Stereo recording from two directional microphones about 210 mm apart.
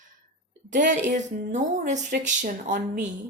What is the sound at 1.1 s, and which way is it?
A woman's voice, 35° right (ahead or behind).